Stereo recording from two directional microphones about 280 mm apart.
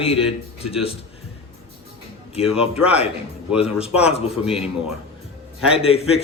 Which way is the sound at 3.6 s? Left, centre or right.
Left.